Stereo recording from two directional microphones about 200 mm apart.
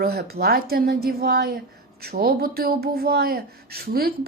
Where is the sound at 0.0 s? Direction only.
50° right (ahead or behind).